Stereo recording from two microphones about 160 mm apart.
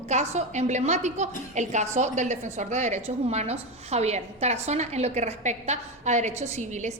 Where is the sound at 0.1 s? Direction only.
45° right (ahead or behind).